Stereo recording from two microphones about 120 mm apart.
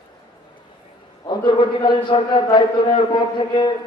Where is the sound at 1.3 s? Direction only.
45° left (ahead or behind).